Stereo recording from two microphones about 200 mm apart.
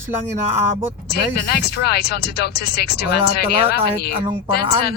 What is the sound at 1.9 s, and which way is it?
Speech, 55° left (ahead or behind).